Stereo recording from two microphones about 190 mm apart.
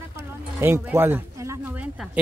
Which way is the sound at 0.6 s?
10° right (ahead or behind).